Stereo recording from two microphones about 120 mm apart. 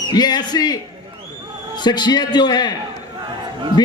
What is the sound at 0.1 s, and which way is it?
A man's voice, 35° left (ahead or behind).